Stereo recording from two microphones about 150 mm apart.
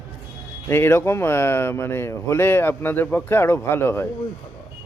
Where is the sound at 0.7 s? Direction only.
15° left (ahead or behind).